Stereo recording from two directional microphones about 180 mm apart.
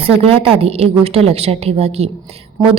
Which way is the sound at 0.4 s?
35° right (ahead or behind).